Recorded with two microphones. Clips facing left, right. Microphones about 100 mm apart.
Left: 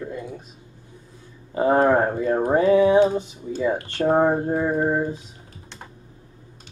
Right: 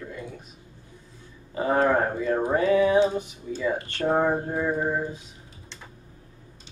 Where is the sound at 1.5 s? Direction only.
30° left (ahead or behind).